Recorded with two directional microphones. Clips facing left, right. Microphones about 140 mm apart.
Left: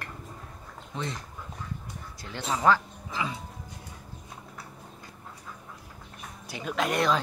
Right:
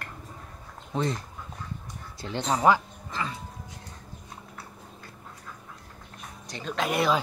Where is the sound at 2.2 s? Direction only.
25° right (ahead or behind).